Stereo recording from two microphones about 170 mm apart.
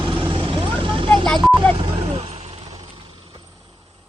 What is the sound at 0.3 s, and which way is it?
Vehicle, 30° right (ahead or behind).